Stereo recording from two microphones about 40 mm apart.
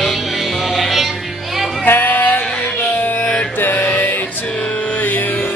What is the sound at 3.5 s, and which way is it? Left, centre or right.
Music, left.